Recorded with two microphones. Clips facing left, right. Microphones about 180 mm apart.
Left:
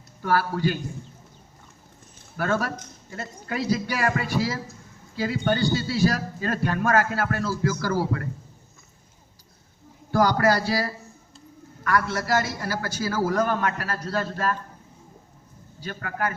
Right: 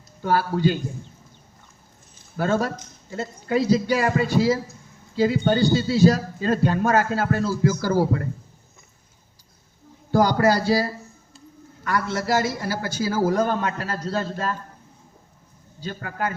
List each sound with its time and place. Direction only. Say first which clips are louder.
0.2 s a man's voice: right 2 dB; 25° right (ahead or behind)
2.4 s a man's voice: right 3 dB; 25° right (ahead or behind)
10.1 s a man's voice: right 2 dB; 25° right (ahead or behind)
15.8 s a man's voice: right 1 dB; 25° right (ahead or behind)